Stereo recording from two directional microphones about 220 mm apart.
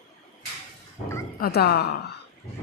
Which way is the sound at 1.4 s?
45° left (ahead or behind).